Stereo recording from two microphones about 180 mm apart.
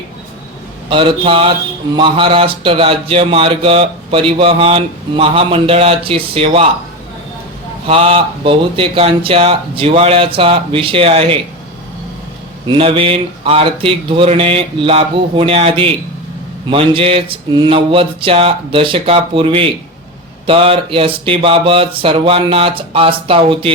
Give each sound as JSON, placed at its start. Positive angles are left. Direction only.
{"t": 0.9, "sound": "mantra", "side_deg": -25}
{"t": 2.0, "sound": "speech", "side_deg": -30}
{"t": 7.9, "sound": "speech", "side_deg": -30}
{"t": 12.6, "sound": "speech", "side_deg": -30}
{"t": 16.6, "sound": "mantra", "side_deg": -30}
{"t": 20.5, "sound": "speech", "side_deg": -30}
{"t": 23.2, "sound": "mantra", "side_deg": -30}